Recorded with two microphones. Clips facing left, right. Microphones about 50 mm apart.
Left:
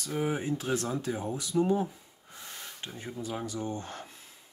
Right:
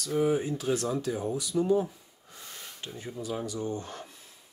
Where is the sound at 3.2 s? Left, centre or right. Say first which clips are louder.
Right 2 dB; left.